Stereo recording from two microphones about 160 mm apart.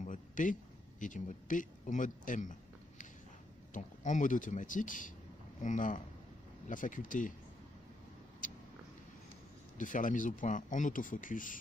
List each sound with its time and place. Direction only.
0.0 s speech: 55° left (ahead or behind)
3.7 s speech: 50° left (ahead or behind)
8.4 s a sound: 55° left (ahead or behind)
9.8 s speech: 55° left (ahead or behind)